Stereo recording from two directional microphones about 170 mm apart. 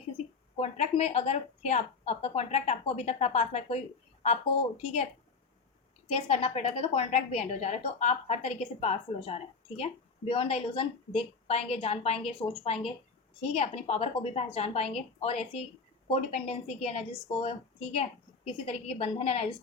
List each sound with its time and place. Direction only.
0.5 s a woman's voice: 40° left (ahead or behind)
6.2 s a woman's voice: 35° left (ahead or behind)